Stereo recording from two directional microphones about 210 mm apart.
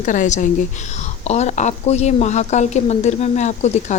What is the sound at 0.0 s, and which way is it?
A woman's voice, 35° left (ahead or behind).